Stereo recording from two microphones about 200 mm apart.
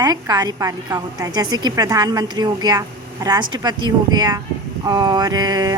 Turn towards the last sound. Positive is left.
turn(degrees=-20)  # may be behind; listen again after turning